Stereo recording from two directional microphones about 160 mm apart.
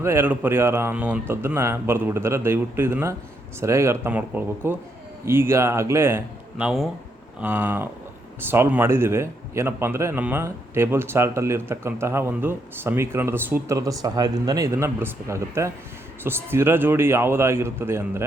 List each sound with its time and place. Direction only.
0.0 s a man's voice: 15° right (ahead or behind)